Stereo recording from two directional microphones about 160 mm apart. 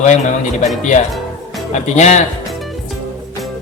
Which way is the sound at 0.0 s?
45° left (ahead or behind).